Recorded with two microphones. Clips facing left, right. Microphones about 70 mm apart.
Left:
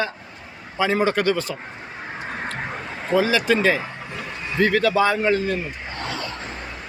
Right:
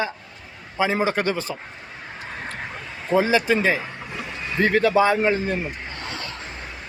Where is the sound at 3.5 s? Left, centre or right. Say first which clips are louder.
Left 2 dB; centre.